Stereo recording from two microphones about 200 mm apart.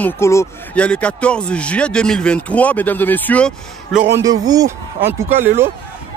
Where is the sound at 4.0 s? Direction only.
15° right (ahead or behind).